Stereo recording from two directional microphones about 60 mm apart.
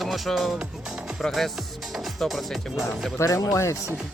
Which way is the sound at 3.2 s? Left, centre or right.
Left.